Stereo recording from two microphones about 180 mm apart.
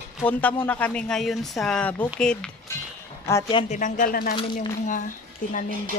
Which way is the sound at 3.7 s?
45° left (ahead or behind).